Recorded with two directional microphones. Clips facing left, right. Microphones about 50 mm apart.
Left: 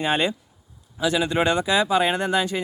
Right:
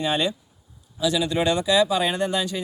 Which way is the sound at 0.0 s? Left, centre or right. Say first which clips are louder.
Left 1 dB; left.